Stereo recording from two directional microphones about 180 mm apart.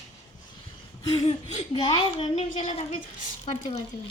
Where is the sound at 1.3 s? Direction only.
30° left (ahead or behind).